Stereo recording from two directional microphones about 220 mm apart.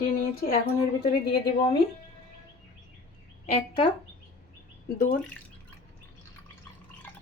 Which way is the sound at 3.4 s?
30° left (ahead or behind).